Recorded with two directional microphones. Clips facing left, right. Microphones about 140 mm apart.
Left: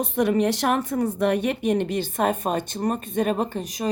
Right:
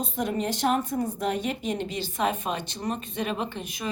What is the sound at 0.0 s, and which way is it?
A woman's voice, 70° left (ahead or behind).